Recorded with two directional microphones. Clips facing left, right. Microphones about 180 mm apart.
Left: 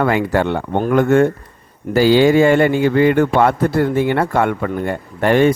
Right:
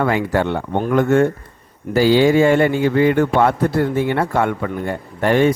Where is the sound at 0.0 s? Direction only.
65° left (ahead or behind).